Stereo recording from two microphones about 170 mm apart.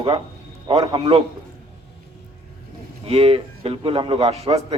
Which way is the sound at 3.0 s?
35° right (ahead or behind).